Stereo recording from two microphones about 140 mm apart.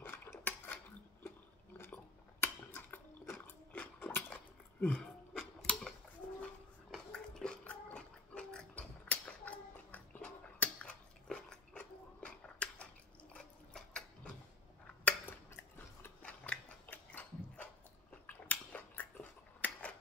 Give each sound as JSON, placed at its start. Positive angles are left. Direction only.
{"t": 0.0, "sound": "cutlery", "side_deg": 15}
{"t": 2.4, "sound": "a sound", "side_deg": 15}
{"t": 15.0, "sound": "chewing", "side_deg": 15}
{"t": 18.2, "sound": "biting", "side_deg": 10}